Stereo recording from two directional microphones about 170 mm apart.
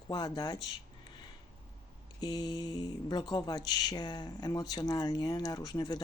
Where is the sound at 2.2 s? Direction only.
25° left (ahead or behind).